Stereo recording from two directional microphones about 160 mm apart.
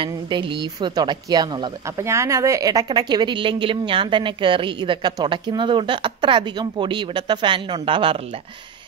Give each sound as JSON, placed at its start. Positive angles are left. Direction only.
{"t": 0.0, "sound": "speech", "side_deg": -30}